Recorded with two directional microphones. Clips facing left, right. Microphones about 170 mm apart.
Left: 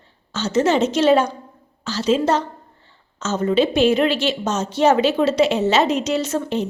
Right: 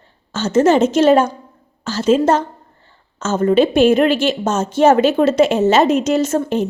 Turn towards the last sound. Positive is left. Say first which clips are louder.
# right 5 dB
turn(degrees=-50)  # may be behind; listen again after turning